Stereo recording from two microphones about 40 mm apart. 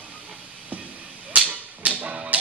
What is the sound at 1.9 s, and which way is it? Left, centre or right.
Typewriter, right.